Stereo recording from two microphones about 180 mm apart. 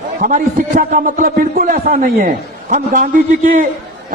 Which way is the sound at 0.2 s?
50° right (ahead or behind).